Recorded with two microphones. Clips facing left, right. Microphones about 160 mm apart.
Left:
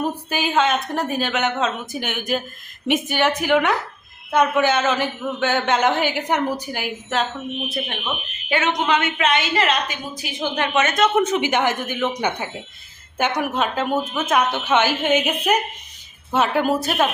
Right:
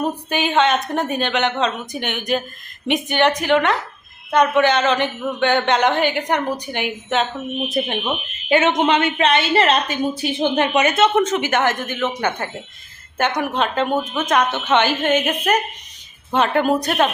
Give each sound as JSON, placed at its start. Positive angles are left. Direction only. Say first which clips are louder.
{"t": 0.3, "sound": "a woman's voice", "louder": "right 3 dB", "side_deg": 0}
{"t": 7.7, "sound": "speech", "louder": "right 5 dB", "side_deg": -20}
{"t": 10.8, "sound": "speech", "louder": "left 1 dB", "side_deg": -10}
{"t": 11.0, "sound": "a woman's voice", "louder": "right 1 dB", "side_deg": 10}